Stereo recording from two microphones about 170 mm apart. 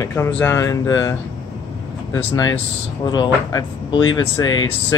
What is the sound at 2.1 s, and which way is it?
Speech, 20° left (ahead or behind).